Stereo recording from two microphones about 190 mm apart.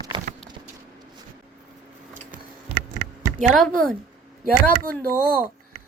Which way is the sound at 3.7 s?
45° right (ahead or behind).